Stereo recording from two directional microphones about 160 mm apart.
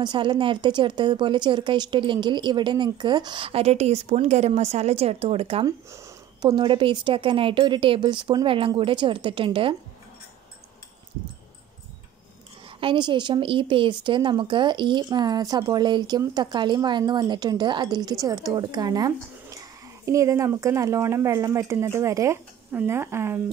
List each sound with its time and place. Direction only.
0.0 s speech: 30° right (ahead or behind)
5.9 s a sound: 20° right (ahead or behind)
6.5 s speech: 30° right (ahead or behind)
12.6 s a woman's voice: 30° right (ahead or behind); by 23.4 s 15° right (ahead or behind)